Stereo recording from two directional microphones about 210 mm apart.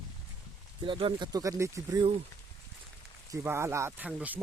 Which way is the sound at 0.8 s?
25° right (ahead or behind).